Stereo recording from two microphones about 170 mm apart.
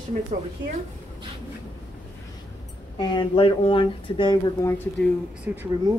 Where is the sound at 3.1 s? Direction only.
30° left (ahead or behind).